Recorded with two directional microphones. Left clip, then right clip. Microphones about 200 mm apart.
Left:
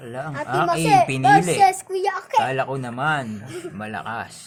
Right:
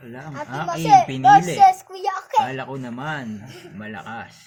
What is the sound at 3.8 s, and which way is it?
Speech, 40° left (ahead or behind).